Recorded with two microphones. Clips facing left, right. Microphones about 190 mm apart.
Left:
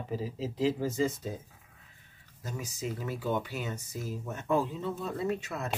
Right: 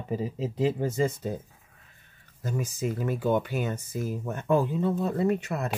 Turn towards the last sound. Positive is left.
turn(degrees=-60)  # may be behind; listen again after turning